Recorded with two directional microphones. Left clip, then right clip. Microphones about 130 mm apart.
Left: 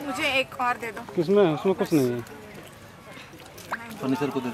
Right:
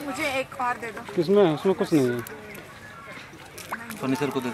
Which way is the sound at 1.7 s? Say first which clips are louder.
Right 1 dB; 25° left (ahead or behind).